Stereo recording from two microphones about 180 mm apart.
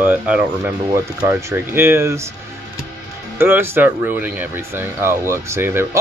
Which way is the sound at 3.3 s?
10° right (ahead or behind).